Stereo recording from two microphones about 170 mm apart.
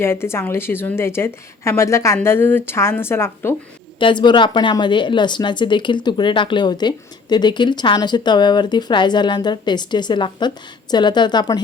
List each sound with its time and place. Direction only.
0.0 s a woman's voice: 15° left (ahead or behind)
4.0 s speech: 25° left (ahead or behind)